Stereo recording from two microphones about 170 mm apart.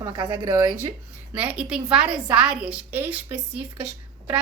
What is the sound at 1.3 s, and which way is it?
A woman's voice, 10° right (ahead or behind).